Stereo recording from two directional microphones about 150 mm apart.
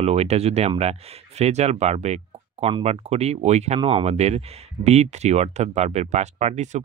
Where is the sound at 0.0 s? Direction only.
45° right (ahead or behind).